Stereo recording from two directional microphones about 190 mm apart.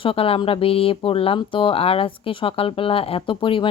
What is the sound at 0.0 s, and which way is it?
Speech, 30° left (ahead or behind).